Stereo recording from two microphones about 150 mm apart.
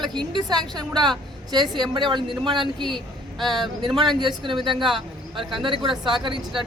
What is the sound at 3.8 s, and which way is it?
Speech, 30° right (ahead or behind).